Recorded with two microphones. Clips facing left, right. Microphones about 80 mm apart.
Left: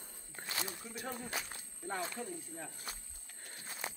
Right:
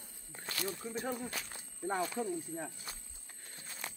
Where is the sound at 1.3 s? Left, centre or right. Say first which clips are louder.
Left 2 dB; centre.